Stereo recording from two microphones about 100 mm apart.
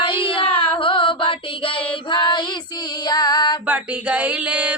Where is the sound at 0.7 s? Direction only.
60° left (ahead or behind).